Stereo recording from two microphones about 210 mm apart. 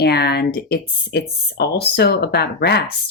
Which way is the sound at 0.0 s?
50° left (ahead or behind).